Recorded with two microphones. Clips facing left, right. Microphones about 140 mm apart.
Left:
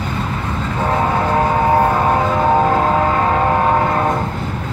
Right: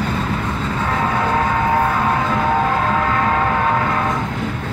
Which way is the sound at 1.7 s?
30° left (ahead or behind).